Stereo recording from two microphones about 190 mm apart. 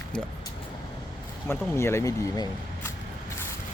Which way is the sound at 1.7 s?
15° left (ahead or behind).